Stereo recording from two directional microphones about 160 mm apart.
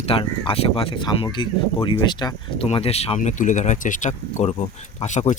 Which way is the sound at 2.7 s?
40° left (ahead or behind).